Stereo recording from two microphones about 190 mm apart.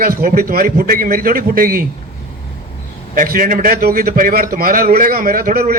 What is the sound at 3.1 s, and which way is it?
A man's voice, 45° right (ahead or behind).